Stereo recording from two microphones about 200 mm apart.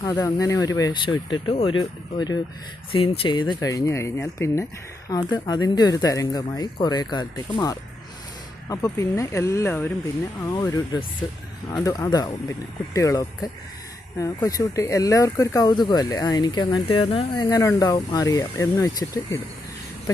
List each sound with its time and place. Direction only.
0.0 s speech: 15° left (ahead or behind)